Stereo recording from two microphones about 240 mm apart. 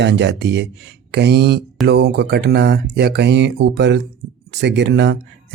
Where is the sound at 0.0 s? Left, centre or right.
Right.